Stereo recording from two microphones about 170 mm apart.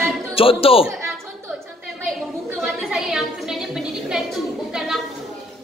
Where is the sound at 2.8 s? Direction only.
5° right (ahead or behind).